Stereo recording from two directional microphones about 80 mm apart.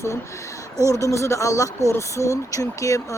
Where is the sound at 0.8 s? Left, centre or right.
Right.